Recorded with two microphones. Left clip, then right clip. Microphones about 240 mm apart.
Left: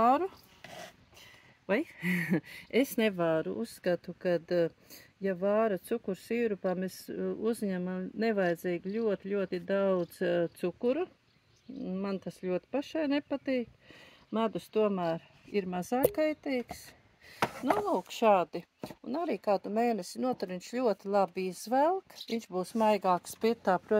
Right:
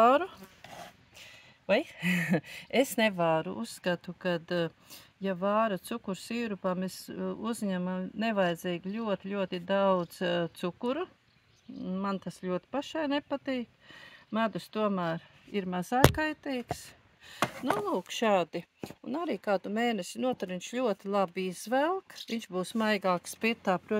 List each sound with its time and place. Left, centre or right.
1.7 s speech: right
17.8 s speech: right
19.5 s speech: right
19.9 s speech: right